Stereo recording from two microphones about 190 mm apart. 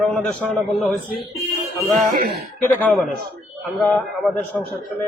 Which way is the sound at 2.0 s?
55° right (ahead or behind).